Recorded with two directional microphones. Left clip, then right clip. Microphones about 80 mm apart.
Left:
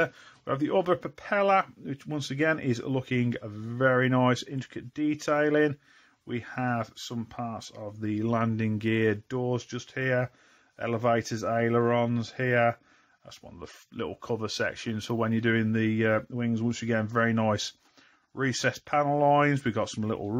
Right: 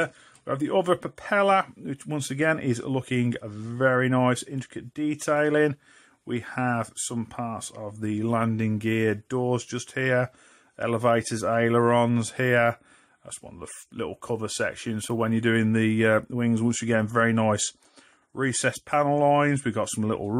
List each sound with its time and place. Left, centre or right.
0.0 s speech: centre
0.8 s speech: right
9.3 s speech: right
9.9 s speech: right
12.4 s speech: right
13.3 s speech: centre
15.4 s speech: right
16.8 s speech: right
18.3 s speech: centre
19.2 s speech: centre
19.8 s speech: right